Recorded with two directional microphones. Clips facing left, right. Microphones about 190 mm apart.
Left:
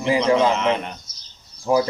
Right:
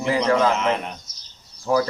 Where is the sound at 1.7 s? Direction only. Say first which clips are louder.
Left 2 dB; 15° left (ahead or behind).